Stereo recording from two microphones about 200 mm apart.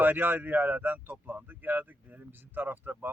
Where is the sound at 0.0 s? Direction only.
10° right (ahead or behind).